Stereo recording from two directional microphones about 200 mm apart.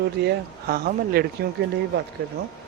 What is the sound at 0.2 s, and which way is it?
A woman's voice, 50° right (ahead or behind).